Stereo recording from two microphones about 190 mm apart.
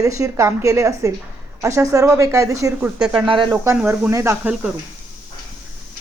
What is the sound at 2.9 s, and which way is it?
Speech, 5° right (ahead or behind).